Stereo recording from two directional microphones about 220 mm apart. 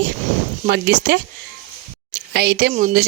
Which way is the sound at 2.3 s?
45° right (ahead or behind).